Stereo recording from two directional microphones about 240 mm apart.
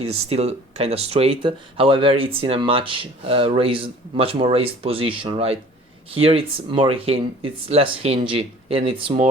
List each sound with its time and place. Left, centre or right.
0.1 s speech: right